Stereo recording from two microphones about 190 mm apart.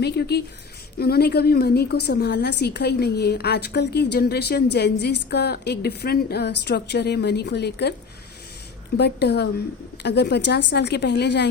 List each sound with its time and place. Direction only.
0.0 s a woman's voice: 60° left (ahead or behind)
9.0 s a woman's voice: 60° left (ahead or behind)